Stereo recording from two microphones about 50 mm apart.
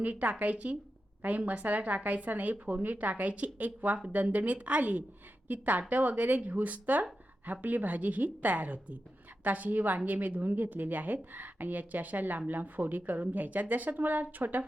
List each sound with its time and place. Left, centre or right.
0.0 s a woman's voice: right